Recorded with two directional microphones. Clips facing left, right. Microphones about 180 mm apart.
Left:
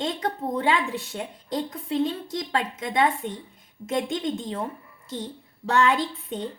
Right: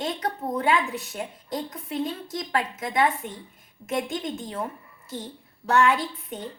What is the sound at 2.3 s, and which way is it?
A woman's voice, 25° left (ahead or behind).